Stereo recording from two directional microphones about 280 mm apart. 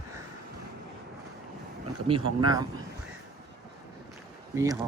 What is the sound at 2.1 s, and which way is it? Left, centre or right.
Speech, centre.